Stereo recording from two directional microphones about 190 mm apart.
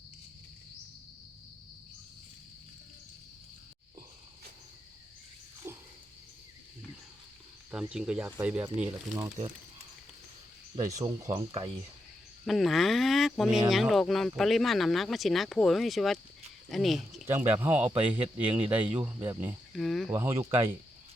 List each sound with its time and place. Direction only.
5.6 s a sound: 15° right (ahead or behind)
7.7 s speech: 5° right (ahead or behind)
9.1 s speech: 20° right (ahead or behind)
10.8 s speech: 20° right (ahead or behind)
12.5 s speech: centre (ahead or behind)
17.2 s speech: 10° right (ahead or behind)
19.7 s speech: centre (ahead or behind)
20.1 s speech: 15° right (ahead or behind)